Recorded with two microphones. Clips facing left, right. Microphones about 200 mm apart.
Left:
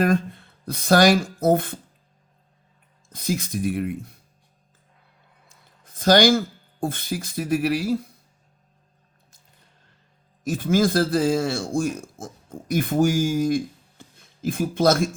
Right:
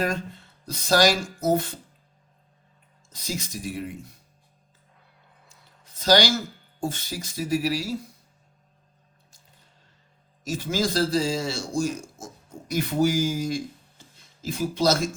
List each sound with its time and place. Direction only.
0.0 s speech: 55° left (ahead or behind)
3.1 s speech: 55° left (ahead or behind)
5.5 s speech: 50° left (ahead or behind)
10.4 s a man's voice: 55° left (ahead or behind)